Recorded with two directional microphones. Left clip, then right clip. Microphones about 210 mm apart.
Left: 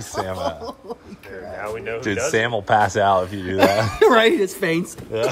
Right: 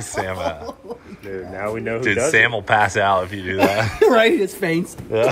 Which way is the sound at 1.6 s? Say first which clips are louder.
Right 3 dB; 35° right (ahead or behind).